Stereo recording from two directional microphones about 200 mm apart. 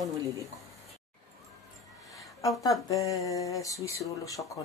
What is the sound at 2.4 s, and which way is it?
Speech, 15° left (ahead or behind).